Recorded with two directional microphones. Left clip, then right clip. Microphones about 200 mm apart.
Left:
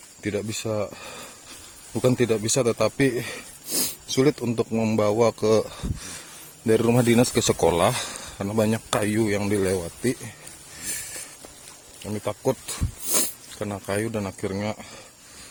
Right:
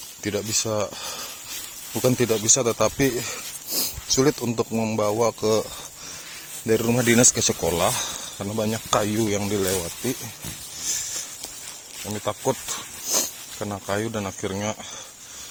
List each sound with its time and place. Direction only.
0.2 s speech: 25° left (ahead or behind); by 7.0 s 40° left (ahead or behind)
7.0 s speech: 25° left (ahead or behind)
7.6 s speech: 45° left (ahead or behind)
12.2 s speech: 35° left (ahead or behind)